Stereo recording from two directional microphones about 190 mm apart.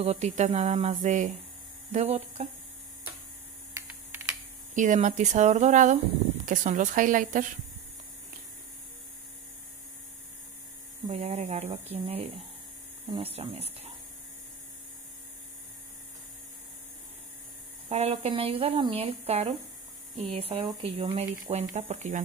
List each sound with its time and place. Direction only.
0.0 s speech: 35° right (ahead or behind)
3.7 s typing: 10° right (ahead or behind)
4.7 s speech: 40° right (ahead or behind)
11.1 s speech: 35° right (ahead or behind)
13.0 s speech: 20° right (ahead or behind)
13.3 s speech: 30° right (ahead or behind)
17.8 s speech: 35° right (ahead or behind)